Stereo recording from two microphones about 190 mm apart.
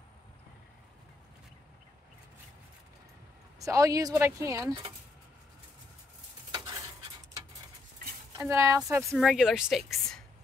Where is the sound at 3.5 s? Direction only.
15° right (ahead or behind).